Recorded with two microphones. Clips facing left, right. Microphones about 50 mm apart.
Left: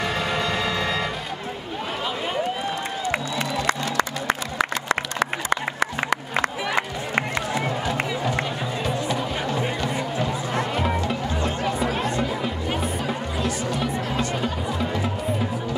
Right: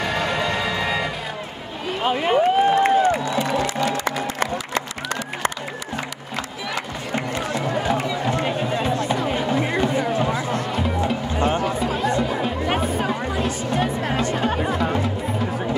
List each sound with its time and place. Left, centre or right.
0.0 s music: centre
2.0 s a sound: right
6.3 s music: left
9.1 s music: right
10.5 s music: left
11.3 s music: right